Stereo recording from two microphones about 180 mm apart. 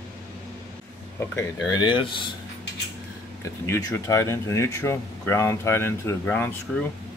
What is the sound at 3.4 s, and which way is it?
Speech, 20° left (ahead or behind).